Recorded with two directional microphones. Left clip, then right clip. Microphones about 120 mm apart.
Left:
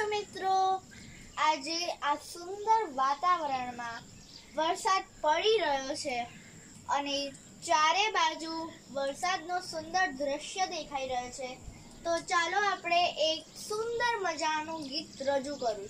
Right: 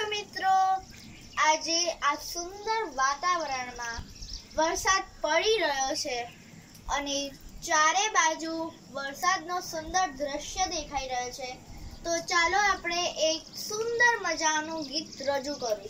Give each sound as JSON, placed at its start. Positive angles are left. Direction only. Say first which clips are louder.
{"t": 0.1, "sound": "child singing", "louder": "right 4 dB", "side_deg": 25}
{"t": 1.3, "sound": "a child's voice", "louder": "right 4 dB", "side_deg": 15}
{"t": 3.0, "sound": "child singing", "louder": "right 1 dB", "side_deg": 5}